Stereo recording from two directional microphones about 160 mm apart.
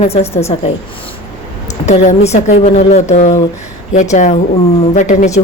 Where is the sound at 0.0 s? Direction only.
40° left (ahead or behind).